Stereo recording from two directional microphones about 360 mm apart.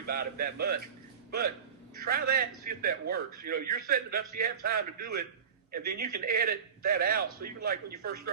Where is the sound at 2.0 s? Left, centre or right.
Right.